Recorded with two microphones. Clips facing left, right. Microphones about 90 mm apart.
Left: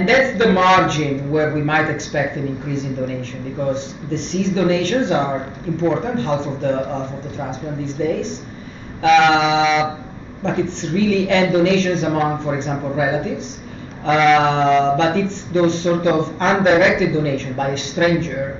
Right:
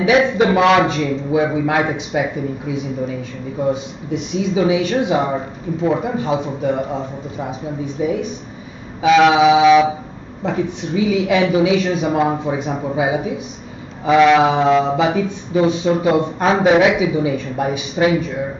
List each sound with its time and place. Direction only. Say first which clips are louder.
0.0 s mantra: right 1 dB; 10° right (ahead or behind)